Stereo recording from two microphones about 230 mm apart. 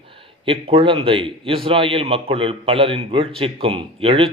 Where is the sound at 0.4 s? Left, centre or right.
Right.